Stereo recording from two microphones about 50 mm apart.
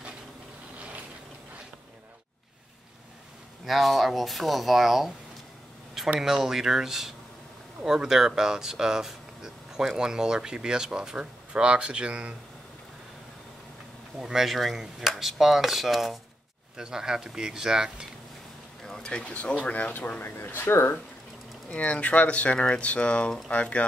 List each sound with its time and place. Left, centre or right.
3.6 s speech: centre
6.1 s speech: centre; by 12.4 s right
14.2 s speech: centre
16.7 s speech: centre
18.9 s speech: centre
20.2 s speech: left
21.6 s speech: left